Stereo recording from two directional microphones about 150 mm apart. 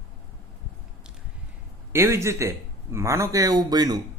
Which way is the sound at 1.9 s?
20° right (ahead or behind).